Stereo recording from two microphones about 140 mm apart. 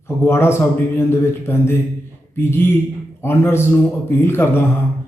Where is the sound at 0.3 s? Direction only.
20° left (ahead or behind).